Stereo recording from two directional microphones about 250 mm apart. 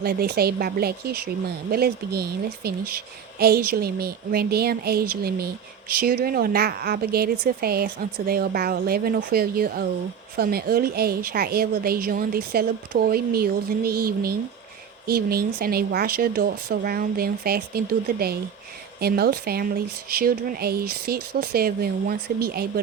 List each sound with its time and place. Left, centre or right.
0.0 s speech: right